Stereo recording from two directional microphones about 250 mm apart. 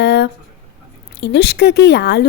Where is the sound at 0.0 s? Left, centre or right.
Left.